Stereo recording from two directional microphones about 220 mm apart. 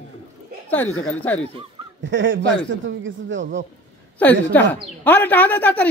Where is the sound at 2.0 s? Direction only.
55° right (ahead or behind).